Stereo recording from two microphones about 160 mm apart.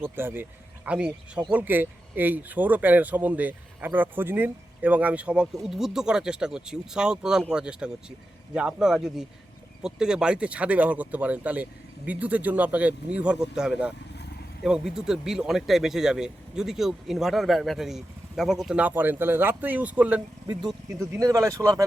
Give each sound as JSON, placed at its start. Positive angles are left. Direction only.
{"t": 0.0, "sound": "speech", "side_deg": -15}
{"t": 21.2, "sound": "speech", "side_deg": -20}